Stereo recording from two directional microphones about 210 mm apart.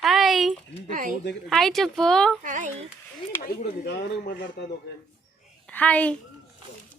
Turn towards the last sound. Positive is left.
turn(degrees=5)  # may be behind; listen again after turning